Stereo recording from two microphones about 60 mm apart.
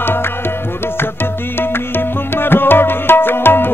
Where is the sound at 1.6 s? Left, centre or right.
Left.